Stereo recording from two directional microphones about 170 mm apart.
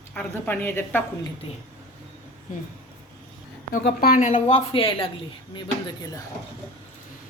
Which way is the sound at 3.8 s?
60° left (ahead or behind).